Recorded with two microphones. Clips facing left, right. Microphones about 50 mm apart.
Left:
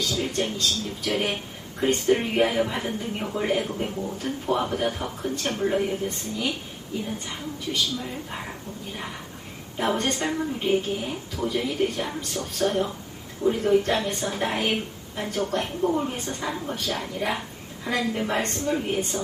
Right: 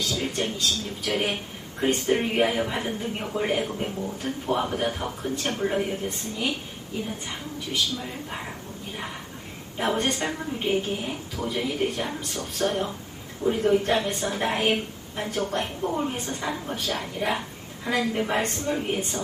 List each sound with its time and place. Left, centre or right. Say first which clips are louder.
0.3 s a woman's voice: left 1 dB; centre
5.9 s speech: left 2 dB; centre
7.3 s a woman's voice: left 1 dB; centre
9.7 s a woman's voice: even; centre